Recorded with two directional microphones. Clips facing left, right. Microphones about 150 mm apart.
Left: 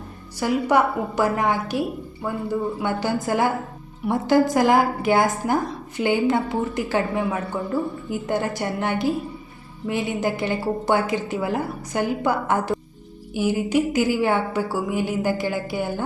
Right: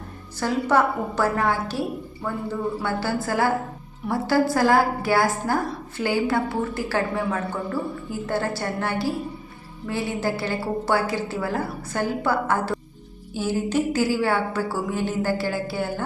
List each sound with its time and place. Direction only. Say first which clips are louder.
0.3 s a woman's voice: left 1 dB; 15° left (ahead or behind)